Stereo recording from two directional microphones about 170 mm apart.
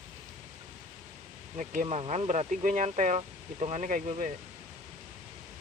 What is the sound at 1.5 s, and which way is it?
Speech, 45° right (ahead or behind).